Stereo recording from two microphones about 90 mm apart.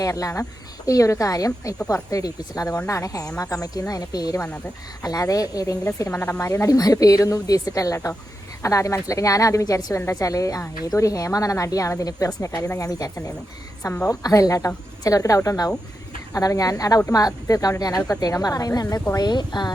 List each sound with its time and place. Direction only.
0.0 s speech: 40° left (ahead or behind)
4.4 s speech: 15° left (ahead or behind)
5.0 s speech: 40° left (ahead or behind)
19.1 s speech: 50° left (ahead or behind)